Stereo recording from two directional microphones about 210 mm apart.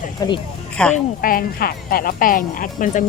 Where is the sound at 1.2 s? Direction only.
45° left (ahead or behind).